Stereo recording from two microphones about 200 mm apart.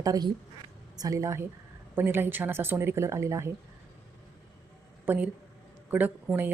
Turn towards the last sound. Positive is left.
turn(degrees=-10)  # may be behind; listen again after turning